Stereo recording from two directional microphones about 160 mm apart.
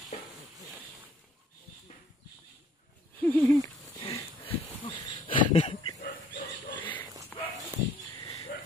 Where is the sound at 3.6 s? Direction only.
25° left (ahead or behind).